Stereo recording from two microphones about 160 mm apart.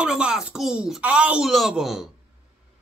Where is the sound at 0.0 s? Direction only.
5° right (ahead or behind).